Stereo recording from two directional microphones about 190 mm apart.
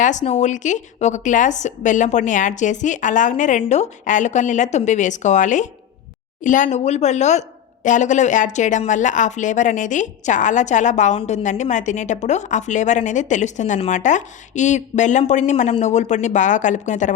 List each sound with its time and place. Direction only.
0.0 s speech: 40° left (ahead or behind)